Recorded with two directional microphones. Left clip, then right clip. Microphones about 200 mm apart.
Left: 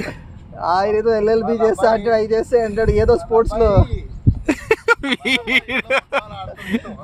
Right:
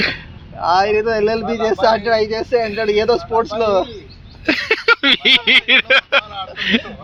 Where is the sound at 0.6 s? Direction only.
80° left.